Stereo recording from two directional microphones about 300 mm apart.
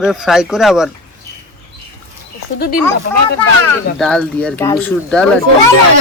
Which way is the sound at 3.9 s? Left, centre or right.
Centre.